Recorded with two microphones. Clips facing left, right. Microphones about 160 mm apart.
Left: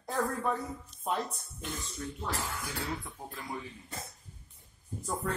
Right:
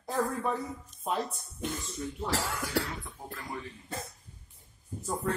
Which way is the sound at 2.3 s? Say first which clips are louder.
Right 7 dB; 90° right.